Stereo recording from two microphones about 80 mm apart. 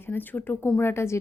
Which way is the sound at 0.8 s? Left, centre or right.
Left.